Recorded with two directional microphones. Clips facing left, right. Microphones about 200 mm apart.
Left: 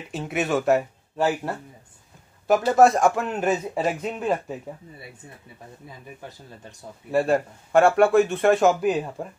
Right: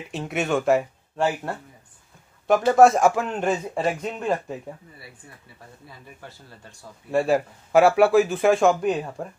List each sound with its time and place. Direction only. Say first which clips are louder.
0.1 s speech: even; centre (ahead or behind)
5.9 s speech: left 3 dB; 20° left (ahead or behind)
7.1 s speech: even; centre (ahead or behind)